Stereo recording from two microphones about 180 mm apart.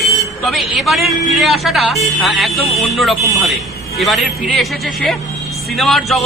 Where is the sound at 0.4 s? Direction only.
Centre (ahead or behind).